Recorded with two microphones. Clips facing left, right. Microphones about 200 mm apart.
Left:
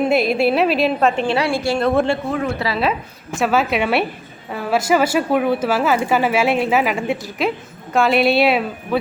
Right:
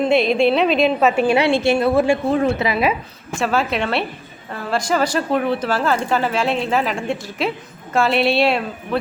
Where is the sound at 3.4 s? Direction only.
5° left (ahead or behind).